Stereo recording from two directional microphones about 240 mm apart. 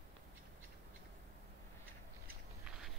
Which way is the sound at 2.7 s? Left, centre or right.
Centre.